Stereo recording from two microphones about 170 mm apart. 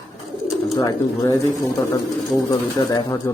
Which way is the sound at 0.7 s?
25° left (ahead or behind).